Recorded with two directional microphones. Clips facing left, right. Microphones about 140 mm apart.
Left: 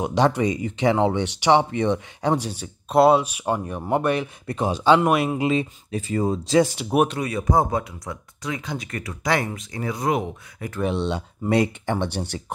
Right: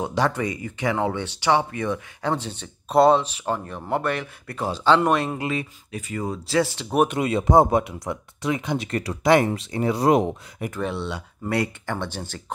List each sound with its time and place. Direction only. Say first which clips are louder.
0.0 s speech: left 3 dB; 20° left (ahead or behind)
2.3 s speech: left 4 dB; 10° left (ahead or behind)
5.5 s speech: left 5 dB; 30° left (ahead or behind); by 7.1 s 10° left (ahead or behind)
7.2 s speech: right 4 dB; 25° right (ahead or behind)
10.8 s speech: left 5 dB; 20° left (ahead or behind)